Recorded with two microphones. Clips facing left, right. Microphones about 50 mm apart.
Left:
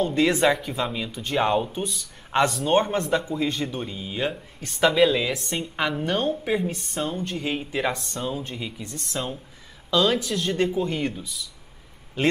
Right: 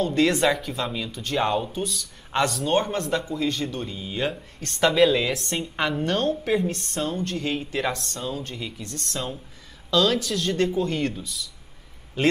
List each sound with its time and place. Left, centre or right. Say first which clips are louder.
0.0 s speech: even; centre